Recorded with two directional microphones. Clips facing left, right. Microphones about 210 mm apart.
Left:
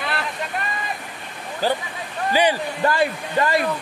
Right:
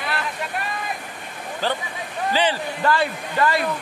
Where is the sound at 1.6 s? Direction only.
10° left (ahead or behind).